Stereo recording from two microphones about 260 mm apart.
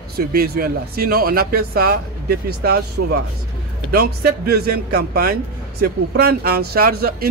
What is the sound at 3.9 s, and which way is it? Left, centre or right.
Speech, right.